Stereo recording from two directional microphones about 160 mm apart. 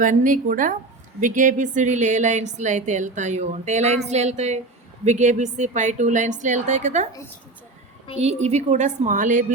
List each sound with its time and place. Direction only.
0.0 s a woman's voice: 55° right (ahead or behind)
8.2 s a woman's voice: 45° right (ahead or behind)